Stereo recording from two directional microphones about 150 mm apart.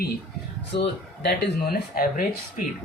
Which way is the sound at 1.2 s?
90° left.